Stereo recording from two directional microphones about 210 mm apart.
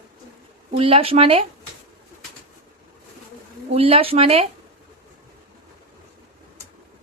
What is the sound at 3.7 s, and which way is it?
Speech, 25° right (ahead or behind).